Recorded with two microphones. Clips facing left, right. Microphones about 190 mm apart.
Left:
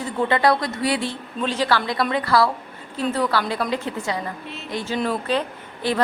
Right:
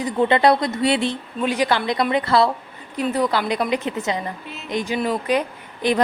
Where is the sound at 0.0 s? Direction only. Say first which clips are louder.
Right 3 dB; 20° right (ahead or behind).